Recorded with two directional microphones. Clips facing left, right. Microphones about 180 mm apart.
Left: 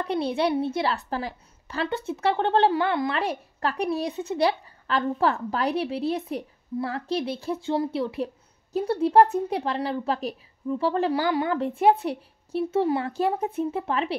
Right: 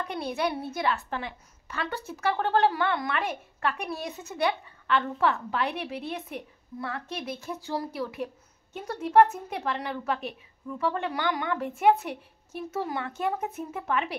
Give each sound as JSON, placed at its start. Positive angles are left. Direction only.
{"t": 0.0, "sound": "a child's voice", "side_deg": 30}